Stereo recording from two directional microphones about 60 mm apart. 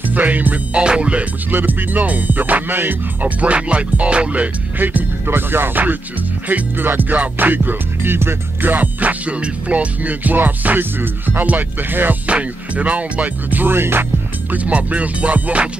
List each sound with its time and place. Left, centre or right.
0.1 s music: right
0.7 s music: centre
1.5 s music: right
14.5 s music: right